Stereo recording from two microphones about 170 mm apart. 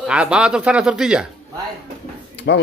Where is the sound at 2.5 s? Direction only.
90° left.